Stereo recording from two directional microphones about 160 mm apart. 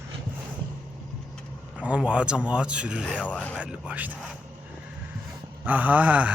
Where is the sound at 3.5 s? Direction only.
10° right (ahead or behind).